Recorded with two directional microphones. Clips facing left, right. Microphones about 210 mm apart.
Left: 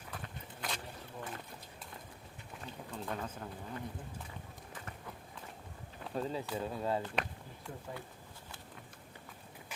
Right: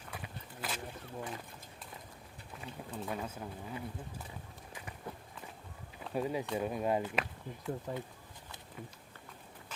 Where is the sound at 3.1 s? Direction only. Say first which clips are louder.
Even; 10° right (ahead or behind).